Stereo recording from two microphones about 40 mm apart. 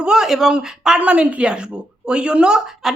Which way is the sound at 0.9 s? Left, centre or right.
Right.